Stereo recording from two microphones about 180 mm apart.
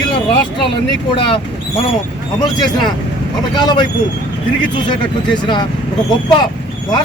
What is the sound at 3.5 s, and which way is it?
Speech, 25° left (ahead or behind).